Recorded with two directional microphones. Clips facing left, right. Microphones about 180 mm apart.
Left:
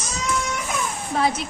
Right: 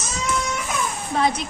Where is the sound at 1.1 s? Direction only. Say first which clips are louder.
Right 1 dB; 5° left (ahead or behind).